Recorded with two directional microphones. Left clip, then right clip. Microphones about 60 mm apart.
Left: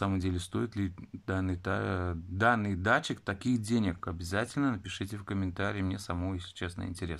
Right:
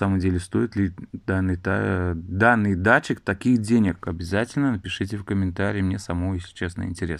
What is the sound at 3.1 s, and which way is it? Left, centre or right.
Speech, right.